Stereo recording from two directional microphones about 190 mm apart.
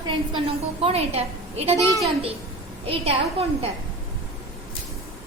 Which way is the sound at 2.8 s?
30° right (ahead or behind).